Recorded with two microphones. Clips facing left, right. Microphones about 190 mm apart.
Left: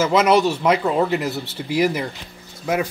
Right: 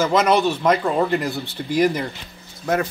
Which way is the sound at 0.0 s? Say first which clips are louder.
Left 1 dB; 5° left (ahead or behind).